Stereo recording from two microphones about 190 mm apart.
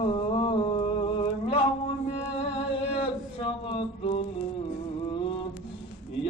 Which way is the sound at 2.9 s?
30° left (ahead or behind).